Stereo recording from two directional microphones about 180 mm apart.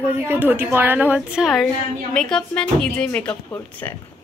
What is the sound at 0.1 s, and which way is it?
A woman's voice, 10° right (ahead or behind).